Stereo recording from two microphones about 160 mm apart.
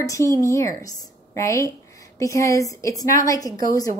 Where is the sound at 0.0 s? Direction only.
20° left (ahead or behind).